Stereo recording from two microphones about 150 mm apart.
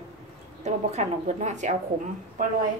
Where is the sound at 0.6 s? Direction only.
50° right (ahead or behind).